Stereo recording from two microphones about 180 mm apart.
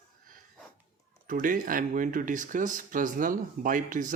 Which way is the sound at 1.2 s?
50° right (ahead or behind).